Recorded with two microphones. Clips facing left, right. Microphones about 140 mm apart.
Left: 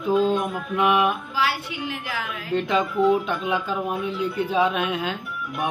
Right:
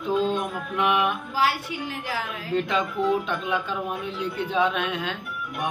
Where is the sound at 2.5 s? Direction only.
5° left (ahead or behind).